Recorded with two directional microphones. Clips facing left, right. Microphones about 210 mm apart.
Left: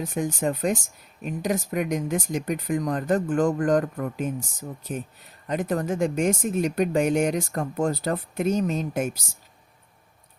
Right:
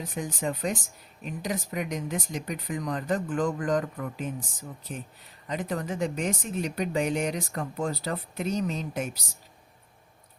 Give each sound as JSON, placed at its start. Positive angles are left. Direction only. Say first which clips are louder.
{"t": 0.0, "sound": "speech", "louder": "left 6 dB", "side_deg": 50}
{"t": 5.5, "sound": "speech", "louder": "left 6 dB", "side_deg": 45}